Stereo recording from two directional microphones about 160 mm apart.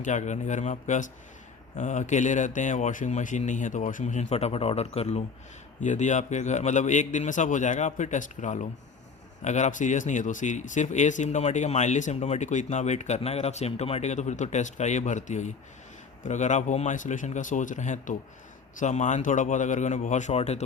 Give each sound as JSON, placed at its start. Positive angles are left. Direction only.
{"t": 0.0, "sound": "speech", "side_deg": 50}